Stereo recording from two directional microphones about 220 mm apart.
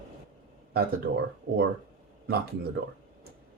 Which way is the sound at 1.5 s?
50° right (ahead or behind).